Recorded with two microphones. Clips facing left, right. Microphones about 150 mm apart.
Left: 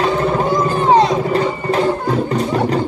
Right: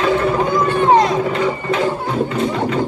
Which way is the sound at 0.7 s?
40° left (ahead or behind).